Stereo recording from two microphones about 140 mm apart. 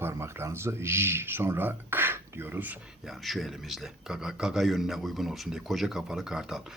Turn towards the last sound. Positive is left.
turn(degrees=-5)  # may be behind; listen again after turning